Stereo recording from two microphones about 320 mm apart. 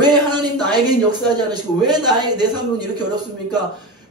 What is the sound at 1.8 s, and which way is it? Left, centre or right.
A man's voice, centre.